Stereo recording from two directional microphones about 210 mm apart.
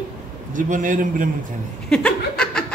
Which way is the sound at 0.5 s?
40° right (ahead or behind).